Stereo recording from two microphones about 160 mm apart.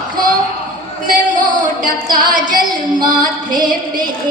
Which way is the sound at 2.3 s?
55° right (ahead or behind).